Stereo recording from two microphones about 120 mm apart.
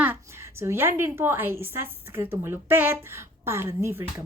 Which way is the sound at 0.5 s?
20° right (ahead or behind).